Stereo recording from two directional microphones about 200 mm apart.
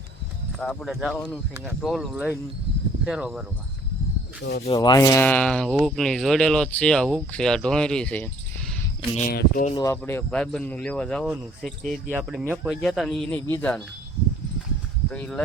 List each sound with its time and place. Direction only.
0.6 s speech: centre (ahead or behind)
4.4 s speech: 60° left (ahead or behind)
4.6 s speech: 20° left (ahead or behind)
9.1 s speech: 40° left (ahead or behind)
9.7 s speech: 15° left (ahead or behind)